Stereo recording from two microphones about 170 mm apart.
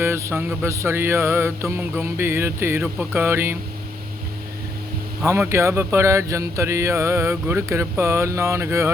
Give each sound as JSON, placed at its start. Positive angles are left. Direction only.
{"t": 0.0, "sound": "speech", "side_deg": -15}
{"t": 5.2, "sound": "speech", "side_deg": -15}